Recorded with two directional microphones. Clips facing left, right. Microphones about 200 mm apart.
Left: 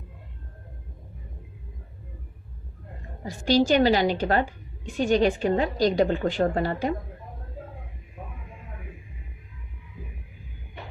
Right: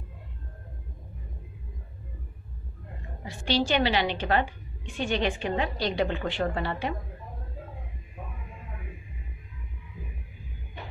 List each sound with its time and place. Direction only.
3.3 s a woman's voice: 40° left (ahead or behind)